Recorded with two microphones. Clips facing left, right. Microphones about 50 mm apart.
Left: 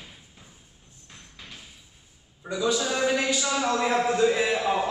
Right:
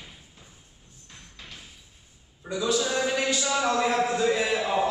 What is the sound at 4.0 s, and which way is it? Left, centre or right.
Mantra, centre.